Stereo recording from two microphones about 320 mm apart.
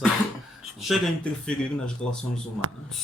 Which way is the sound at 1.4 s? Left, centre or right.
Centre.